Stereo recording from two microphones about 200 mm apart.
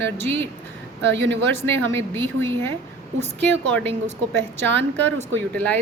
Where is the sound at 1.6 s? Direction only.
10° left (ahead or behind).